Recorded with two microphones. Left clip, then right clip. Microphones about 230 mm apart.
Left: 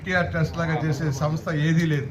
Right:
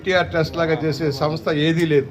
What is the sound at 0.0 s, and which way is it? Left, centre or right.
Speech, right.